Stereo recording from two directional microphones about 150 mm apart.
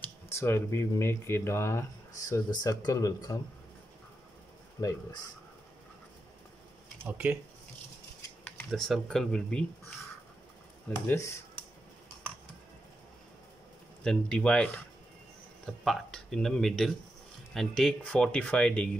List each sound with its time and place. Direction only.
0.0 s speech: 15° left (ahead or behind)
4.7 s speech: 20° left (ahead or behind)
7.1 s speech: 10° right (ahead or behind)
8.5 s speech: 5° left (ahead or behind)
11.1 s speech: 20° left (ahead or behind)
14.0 s speech: 5° left (ahead or behind)